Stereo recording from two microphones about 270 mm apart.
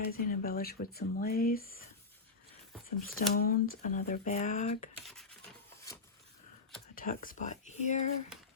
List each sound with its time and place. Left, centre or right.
0.1 s speech: left
3.2 s speech: left
6.9 s speech: left